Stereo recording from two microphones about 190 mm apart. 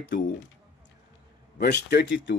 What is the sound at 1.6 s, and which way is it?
Speech, 55° left (ahead or behind).